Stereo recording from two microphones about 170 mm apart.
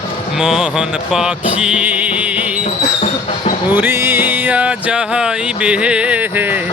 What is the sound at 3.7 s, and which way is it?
Music, 10° right (ahead or behind).